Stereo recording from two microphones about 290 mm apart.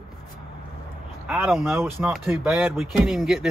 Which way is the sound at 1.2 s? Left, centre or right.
Centre.